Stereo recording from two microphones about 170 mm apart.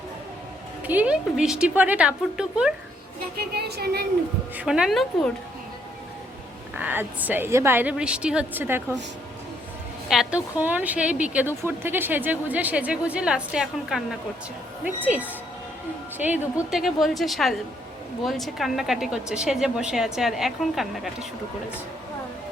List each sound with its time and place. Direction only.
0.9 s a woman's voice: 10° right (ahead or behind)
3.3 s speech: 70° right (ahead or behind)
4.5 s speech: 5° right (ahead or behind)
6.7 s a woman's voice: 10° right (ahead or behind)
10.1 s a woman's voice: 5° right (ahead or behind)
15.0 s a woman's voice: 10° right (ahead or behind)